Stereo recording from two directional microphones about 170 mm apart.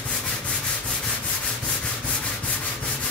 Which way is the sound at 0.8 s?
5° left (ahead or behind).